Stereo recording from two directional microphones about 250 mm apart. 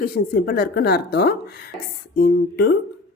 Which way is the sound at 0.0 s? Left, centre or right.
Left.